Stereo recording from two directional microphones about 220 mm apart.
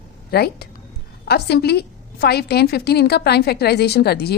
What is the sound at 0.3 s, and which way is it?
A woman's voice, 45° left (ahead or behind).